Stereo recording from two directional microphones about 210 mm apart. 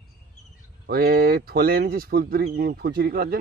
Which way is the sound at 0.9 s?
45° right (ahead or behind).